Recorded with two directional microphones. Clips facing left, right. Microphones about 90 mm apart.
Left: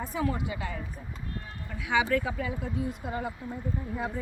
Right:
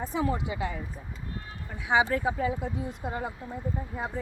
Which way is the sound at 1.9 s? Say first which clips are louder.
Right 2 dB; 30° right (ahead or behind).